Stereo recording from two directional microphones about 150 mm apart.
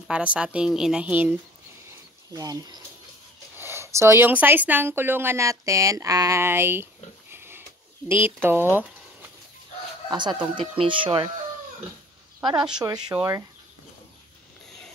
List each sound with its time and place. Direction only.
0.1 s a woman's voice: 10° right (ahead or behind)
2.3 s speech: 25° right (ahead or behind)
3.5 s a woman's voice: 15° right (ahead or behind)
10.0 s speech: 30° right (ahead or behind)
12.4 s speech: 5° right (ahead or behind)
13.1 s speech: 20° right (ahead or behind)